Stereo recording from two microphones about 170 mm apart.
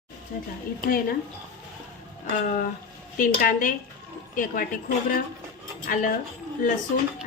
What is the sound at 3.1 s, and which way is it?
A woman's voice, 50° left (ahead or behind).